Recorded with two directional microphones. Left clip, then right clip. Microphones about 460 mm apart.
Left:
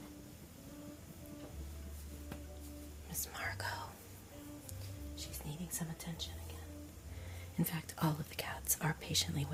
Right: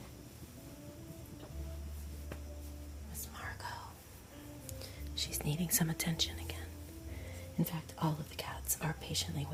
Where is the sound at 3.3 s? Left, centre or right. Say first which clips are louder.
Left 3 dB; left.